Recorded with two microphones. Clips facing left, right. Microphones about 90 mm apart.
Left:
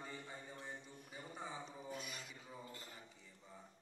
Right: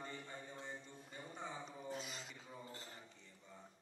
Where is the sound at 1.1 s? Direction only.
10° left (ahead or behind).